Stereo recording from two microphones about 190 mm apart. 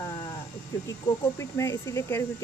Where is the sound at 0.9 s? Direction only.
15° left (ahead or behind).